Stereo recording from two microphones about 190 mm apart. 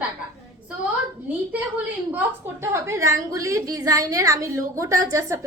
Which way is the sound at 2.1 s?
15° right (ahead or behind).